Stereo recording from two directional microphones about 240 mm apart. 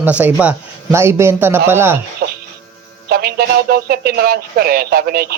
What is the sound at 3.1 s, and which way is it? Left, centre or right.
Speech, right.